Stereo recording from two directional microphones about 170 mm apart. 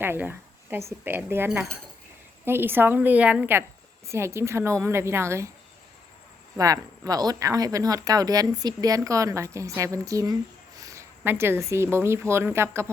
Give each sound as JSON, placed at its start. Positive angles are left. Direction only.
{"t": 0.0, "sound": "speech", "side_deg": -10}
{"t": 6.6, "sound": "speech", "side_deg": -20}